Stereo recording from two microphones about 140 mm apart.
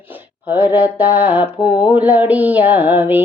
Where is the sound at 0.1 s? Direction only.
10° right (ahead or behind).